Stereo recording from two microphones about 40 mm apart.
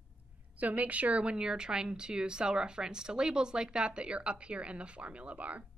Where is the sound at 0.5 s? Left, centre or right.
Right.